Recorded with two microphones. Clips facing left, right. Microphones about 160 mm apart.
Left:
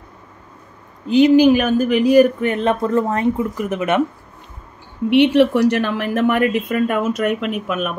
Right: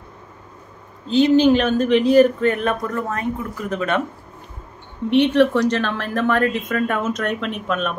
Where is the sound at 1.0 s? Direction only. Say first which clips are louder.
Left 3 dB; 15° left (ahead or behind).